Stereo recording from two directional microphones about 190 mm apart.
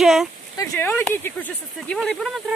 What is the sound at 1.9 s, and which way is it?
Speech, centre (ahead or behind).